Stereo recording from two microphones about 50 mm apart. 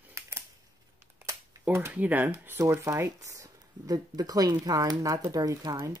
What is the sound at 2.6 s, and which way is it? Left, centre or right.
Speech, right.